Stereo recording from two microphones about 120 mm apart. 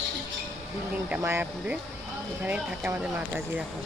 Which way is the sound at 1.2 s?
20° right (ahead or behind).